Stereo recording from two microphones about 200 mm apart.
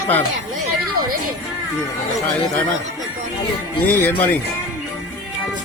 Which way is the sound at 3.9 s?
10° left (ahead or behind).